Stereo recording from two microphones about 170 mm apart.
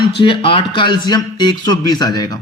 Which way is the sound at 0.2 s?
30° left (ahead or behind).